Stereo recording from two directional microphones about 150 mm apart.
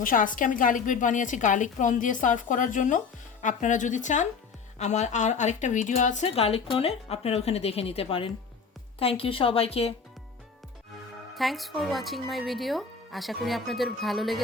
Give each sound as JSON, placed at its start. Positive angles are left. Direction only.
{"t": 0.0, "sound": "a woman's voice", "side_deg": 65}
{"t": 11.3, "sound": "speech", "side_deg": 0}